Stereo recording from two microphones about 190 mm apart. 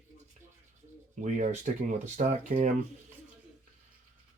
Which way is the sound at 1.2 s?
40° right (ahead or behind).